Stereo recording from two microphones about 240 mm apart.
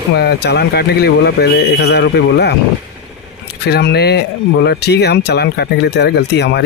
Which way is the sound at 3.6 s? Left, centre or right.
Left.